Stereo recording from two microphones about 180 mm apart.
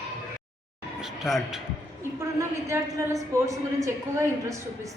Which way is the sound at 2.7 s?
15° right (ahead or behind).